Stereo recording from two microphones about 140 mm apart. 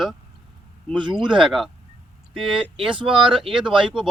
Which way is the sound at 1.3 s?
5° right (ahead or behind).